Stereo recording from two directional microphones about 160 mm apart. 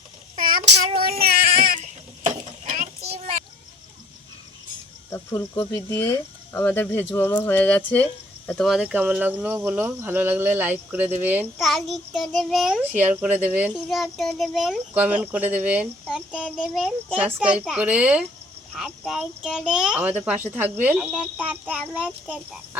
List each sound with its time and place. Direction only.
0.3 s child singing: 60° right (ahead or behind)
1.2 s baby cry: 65° right (ahead or behind)
2.2 s stir: 45° right (ahead or behind)
5.1 s speech: 15° left (ahead or behind); by 11.4 s 10° right (ahead or behind)
11.6 s speech: centre (ahead or behind)